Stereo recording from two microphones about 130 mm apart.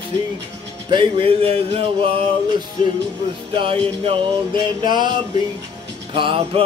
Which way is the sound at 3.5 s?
40° right (ahead or behind).